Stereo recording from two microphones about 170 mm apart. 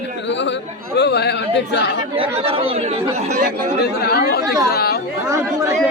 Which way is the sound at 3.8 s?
70° left (ahead or behind).